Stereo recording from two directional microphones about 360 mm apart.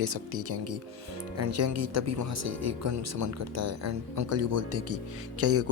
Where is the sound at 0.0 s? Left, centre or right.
Right.